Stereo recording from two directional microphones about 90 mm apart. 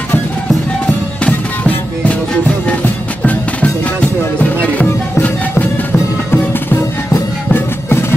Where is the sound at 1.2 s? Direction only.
15° left (ahead or behind).